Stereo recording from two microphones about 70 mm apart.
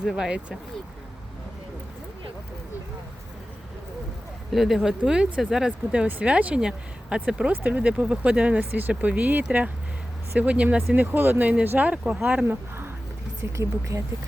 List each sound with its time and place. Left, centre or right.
0.1 s speech: centre
4.5 s speech: centre; by 12.9 s right
13.4 s speech: right